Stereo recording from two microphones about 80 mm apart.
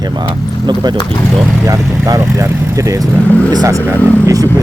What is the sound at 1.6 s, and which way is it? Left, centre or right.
Speech, right.